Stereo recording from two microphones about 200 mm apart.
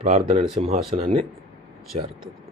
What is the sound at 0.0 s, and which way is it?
Speech, 35° right (ahead or behind).